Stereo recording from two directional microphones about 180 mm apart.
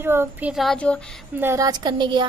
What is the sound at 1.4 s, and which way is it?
Speech, 15° right (ahead or behind).